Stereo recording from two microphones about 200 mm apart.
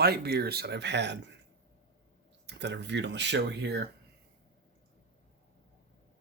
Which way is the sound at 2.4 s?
60° right (ahead or behind).